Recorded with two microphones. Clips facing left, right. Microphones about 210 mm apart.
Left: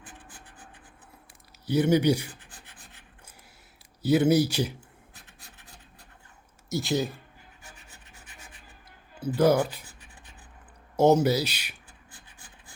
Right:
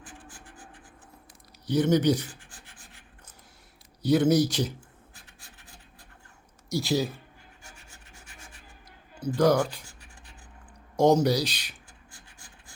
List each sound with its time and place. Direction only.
0.0 s scratch: 60° left (ahead or behind)
1.6 s speech: 10° left (ahead or behind)
2.3 s rub: 60° left (ahead or behind)
4.0 s speech: 5° left (ahead or behind)
6.7 s speech: centre (ahead or behind)
9.2 s speech: 5° left (ahead or behind)
10.9 s speech: 5° left (ahead or behind)